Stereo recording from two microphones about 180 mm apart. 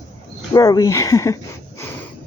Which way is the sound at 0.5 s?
20° left (ahead or behind).